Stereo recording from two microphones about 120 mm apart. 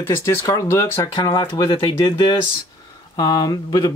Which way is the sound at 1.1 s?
35° left (ahead or behind).